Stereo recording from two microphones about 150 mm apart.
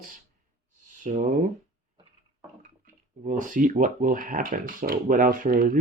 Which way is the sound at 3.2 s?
60° right (ahead or behind).